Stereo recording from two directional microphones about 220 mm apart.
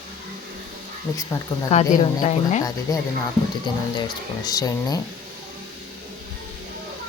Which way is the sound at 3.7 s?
20° left (ahead or behind).